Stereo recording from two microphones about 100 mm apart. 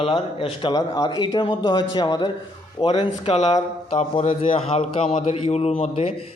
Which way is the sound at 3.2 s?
90° left.